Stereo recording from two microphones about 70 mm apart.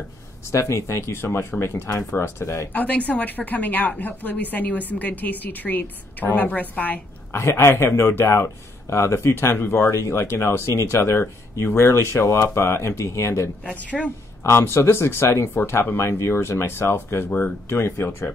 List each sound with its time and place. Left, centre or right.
0.5 s speech: left
2.7 s a woman's voice: left
7.3 s speech: left
13.8 s a woman's voice: centre
14.4 s speech: left
17.3 s a woman's voice: left
17.6 s speech: left